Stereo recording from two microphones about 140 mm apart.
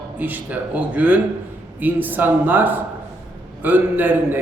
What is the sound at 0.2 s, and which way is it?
A man's voice, 10° right (ahead or behind).